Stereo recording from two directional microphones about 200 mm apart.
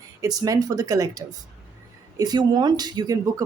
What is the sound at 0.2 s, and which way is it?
Speech, 15° right (ahead or behind).